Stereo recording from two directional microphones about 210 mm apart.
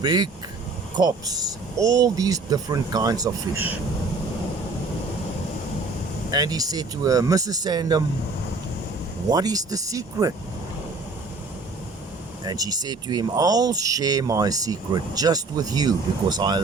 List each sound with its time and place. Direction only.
0.0 s speech: 20° right (ahead or behind)
6.3 s speech: 20° right (ahead or behind)
9.3 s speech: 20° right (ahead or behind)
12.5 s speech: 20° right (ahead or behind)